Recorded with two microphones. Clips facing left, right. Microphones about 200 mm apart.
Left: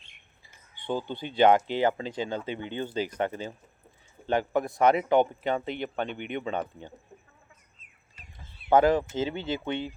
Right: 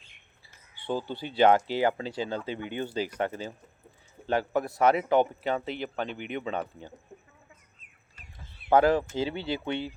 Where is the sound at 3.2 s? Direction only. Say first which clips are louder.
Left 1 dB; 20° left (ahead or behind).